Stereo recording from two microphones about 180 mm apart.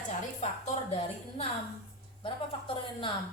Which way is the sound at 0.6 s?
35° left (ahead or behind).